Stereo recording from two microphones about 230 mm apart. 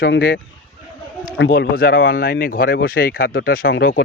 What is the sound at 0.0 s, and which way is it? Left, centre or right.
Speech, left.